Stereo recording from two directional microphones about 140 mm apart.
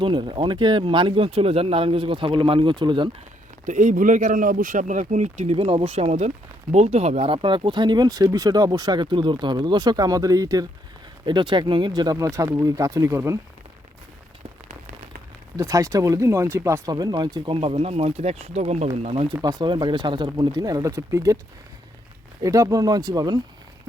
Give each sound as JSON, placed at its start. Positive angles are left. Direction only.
{"t": 0.0, "sound": "speech", "side_deg": -35}
{"t": 3.7, "sound": "speech", "side_deg": -65}
{"t": 15.5, "sound": "speech", "side_deg": -25}
{"t": 22.4, "sound": "speech", "side_deg": -25}